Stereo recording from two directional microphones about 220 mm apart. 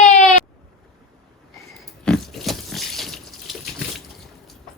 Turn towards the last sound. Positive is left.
turn(degrees=0)  # may be behind; listen again after turning